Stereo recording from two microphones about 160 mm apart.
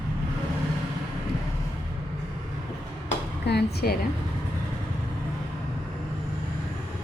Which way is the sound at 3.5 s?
85° left.